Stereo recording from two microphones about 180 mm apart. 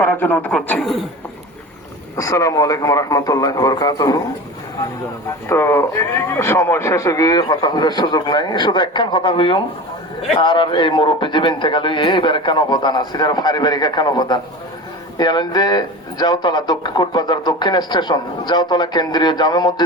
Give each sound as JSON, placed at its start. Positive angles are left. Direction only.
{"t": 0.0, "sound": "a man's voice", "side_deg": 10}
{"t": 2.1, "sound": "a man's voice", "side_deg": 15}
{"t": 5.5, "sound": "a man's voice", "side_deg": 15}